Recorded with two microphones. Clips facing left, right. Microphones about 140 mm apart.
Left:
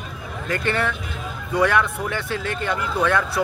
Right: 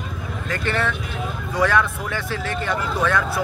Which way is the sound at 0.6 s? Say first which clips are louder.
Right 1 dB; 15° left (ahead or behind).